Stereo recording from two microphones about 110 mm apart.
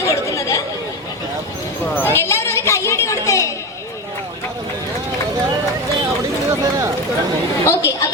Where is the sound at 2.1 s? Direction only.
20° left (ahead or behind).